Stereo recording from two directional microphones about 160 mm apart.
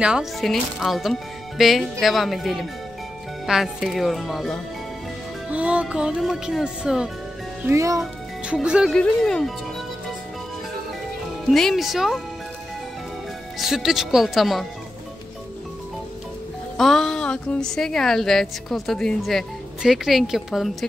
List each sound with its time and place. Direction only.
0.0 s a woman's voice: 5° right (ahead or behind)
7.6 s speech: 20° right (ahead or behind)
8.0 s speech: 5° right (ahead or behind)
11.4 s a woman's voice: centre (ahead or behind)
13.6 s a woman's voice: centre (ahead or behind)
16.7 s a woman's voice: centre (ahead or behind)